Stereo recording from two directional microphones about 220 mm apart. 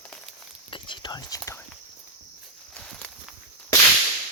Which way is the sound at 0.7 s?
20° left (ahead or behind).